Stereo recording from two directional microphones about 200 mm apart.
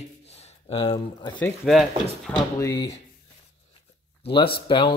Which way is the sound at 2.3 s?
20° left (ahead or behind).